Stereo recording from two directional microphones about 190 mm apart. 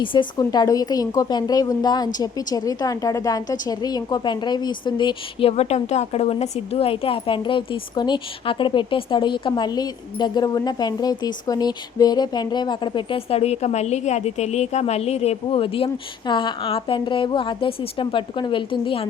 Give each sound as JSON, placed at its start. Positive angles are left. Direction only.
{"t": 0.0, "sound": "a woman's voice", "side_deg": 25}